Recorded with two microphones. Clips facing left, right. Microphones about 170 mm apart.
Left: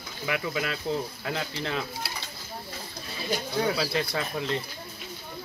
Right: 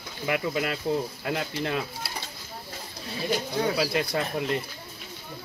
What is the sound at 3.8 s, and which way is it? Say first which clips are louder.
Speech: right 2 dB; 10° right (ahead or behind).